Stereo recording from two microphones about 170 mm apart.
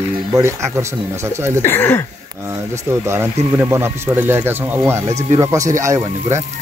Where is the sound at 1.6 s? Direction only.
15° left (ahead or behind).